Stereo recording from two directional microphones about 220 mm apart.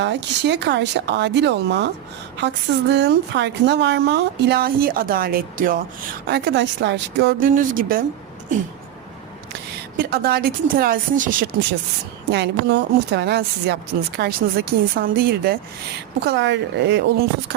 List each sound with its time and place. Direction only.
0.0 s a woman's voice: 50° right (ahead or behind)
6.2 s a woman's voice: 50° right (ahead or behind)
10.0 s speech: 45° right (ahead or behind)
12.3 s a woman's voice: 50° right (ahead or behind)